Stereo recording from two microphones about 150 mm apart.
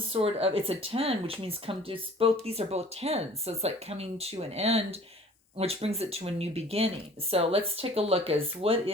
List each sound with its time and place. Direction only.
0.1 s speech: 40° right (ahead or behind)